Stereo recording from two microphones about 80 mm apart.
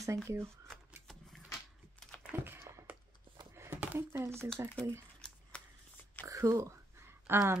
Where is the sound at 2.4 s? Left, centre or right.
Right.